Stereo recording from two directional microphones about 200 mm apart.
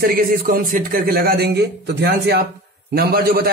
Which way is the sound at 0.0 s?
45° right (ahead or behind).